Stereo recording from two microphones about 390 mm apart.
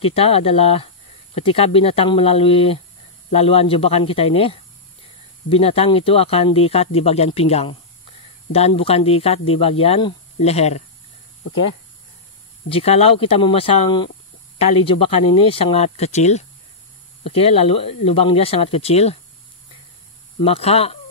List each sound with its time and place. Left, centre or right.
0.0 s speech: centre
12.6 s speech: centre
20.4 s speech: centre